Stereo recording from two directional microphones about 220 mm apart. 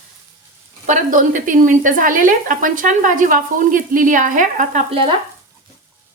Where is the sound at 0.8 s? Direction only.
35° right (ahead or behind).